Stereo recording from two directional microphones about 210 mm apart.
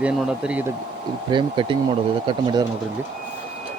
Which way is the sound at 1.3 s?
25° right (ahead or behind).